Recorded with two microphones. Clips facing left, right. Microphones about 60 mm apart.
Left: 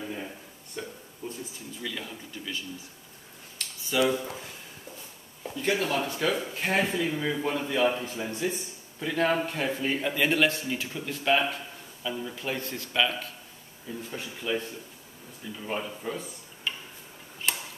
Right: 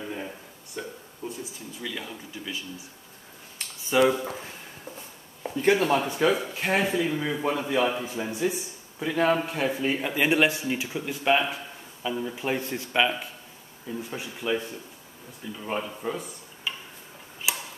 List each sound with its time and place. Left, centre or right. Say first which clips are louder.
0.8 s speech: right 2 dB; centre
1.2 s a sound: right 2 dB; centre
1.8 s a man's voice: right 1 dB; centre
3.6 s a sound: even; right
5.4 s speech: right 6 dB; right
5.9 s a man's voice: right 4 dB; centre
17.5 s tick-tock: right 1 dB; centre